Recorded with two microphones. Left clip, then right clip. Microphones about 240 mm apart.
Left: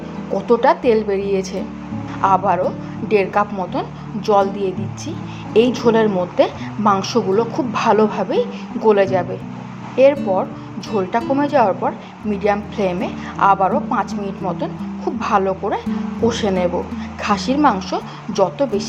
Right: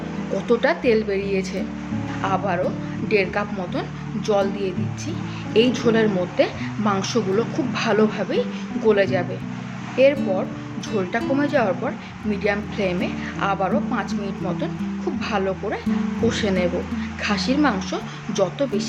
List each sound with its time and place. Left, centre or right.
0.3 s a woman's voice: centre
11.2 s a woman's voice: centre